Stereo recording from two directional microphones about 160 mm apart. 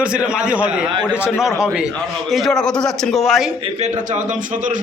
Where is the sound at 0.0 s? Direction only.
5° right (ahead or behind).